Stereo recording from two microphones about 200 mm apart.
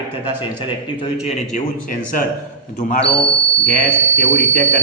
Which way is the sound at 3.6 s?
5° left (ahead or behind).